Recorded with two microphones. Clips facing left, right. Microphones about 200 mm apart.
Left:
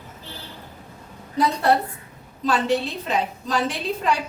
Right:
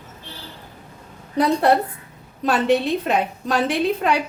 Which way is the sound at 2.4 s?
60° right (ahead or behind).